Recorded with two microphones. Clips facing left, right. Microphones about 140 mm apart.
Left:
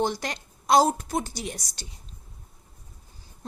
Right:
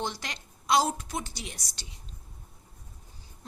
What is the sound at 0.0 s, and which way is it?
A woman's voice, 45° left (ahead or behind).